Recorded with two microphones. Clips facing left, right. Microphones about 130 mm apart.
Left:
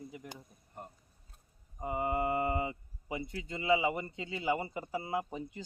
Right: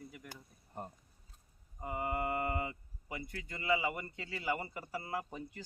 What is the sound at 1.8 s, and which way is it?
Speech, 25° left (ahead or behind).